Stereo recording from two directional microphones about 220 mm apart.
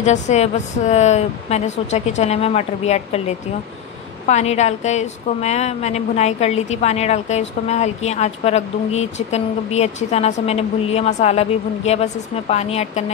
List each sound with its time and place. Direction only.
0.0 s a woman's voice: 30° left (ahead or behind)